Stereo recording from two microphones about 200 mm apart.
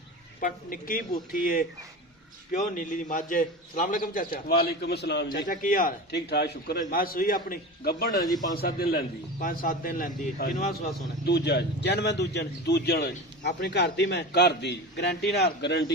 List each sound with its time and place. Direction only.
0.3 s a man's voice: 45° left (ahead or behind)